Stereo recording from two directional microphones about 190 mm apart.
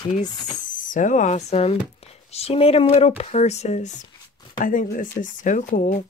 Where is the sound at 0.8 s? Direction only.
45° left (ahead or behind).